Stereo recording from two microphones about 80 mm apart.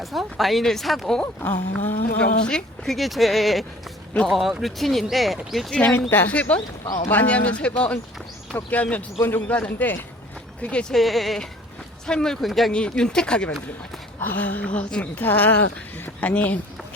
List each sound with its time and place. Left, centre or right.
0.0 s speech: centre
1.4 s a woman's voice: left
2.4 s speech: centre
5.7 s a woman's voice: centre
10.9 s speech: centre
14.2 s a woman's voice: left